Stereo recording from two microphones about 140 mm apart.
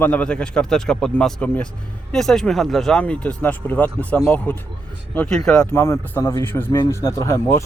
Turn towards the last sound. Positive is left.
turn(degrees=20)  # may be behind; listen again after turning